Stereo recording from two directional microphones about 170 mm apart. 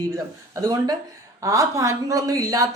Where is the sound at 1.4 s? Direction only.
20° right (ahead or behind).